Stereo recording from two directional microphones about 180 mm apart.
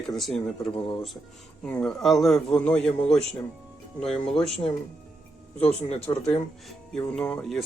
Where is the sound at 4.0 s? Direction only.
5° left (ahead or behind).